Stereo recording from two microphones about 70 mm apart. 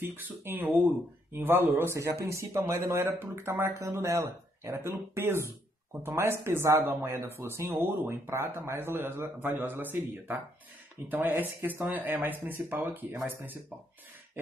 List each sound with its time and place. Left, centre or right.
0.0 s a man's voice: right
2.0 s a man's voice: right